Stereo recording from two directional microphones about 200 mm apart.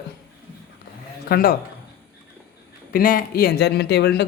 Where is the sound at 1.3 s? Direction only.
45° left (ahead or behind).